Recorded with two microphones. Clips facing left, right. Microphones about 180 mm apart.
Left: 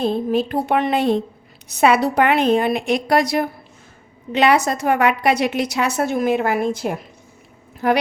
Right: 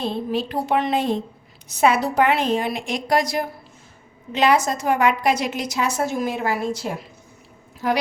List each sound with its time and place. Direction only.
0.0 s a woman's voice: 50° left (ahead or behind)